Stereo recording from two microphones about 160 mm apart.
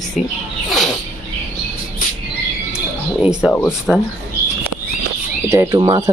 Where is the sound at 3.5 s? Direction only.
10° left (ahead or behind).